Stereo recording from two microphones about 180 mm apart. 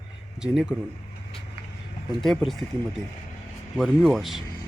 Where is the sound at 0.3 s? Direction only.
5° right (ahead or behind).